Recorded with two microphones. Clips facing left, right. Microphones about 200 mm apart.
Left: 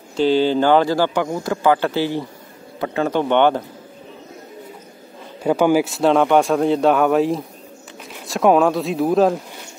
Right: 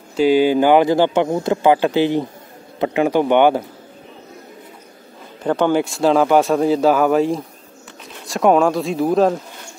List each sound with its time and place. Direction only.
0.1 s speech: 10° right (ahead or behind)
5.4 s speech: 10° left (ahead or behind)